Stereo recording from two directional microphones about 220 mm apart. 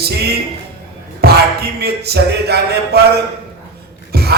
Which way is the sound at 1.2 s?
45° right (ahead or behind).